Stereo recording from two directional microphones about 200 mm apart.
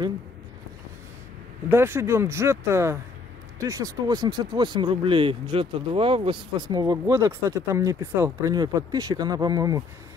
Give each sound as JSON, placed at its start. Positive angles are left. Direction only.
{"t": 1.7, "sound": "speech", "side_deg": -10}